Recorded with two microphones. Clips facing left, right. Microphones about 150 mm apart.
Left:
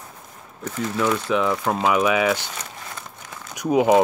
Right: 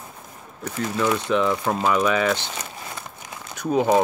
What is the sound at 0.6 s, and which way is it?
Speech, 10° right (ahead or behind).